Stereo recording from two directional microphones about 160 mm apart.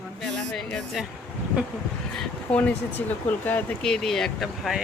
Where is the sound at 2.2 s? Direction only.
10° left (ahead or behind).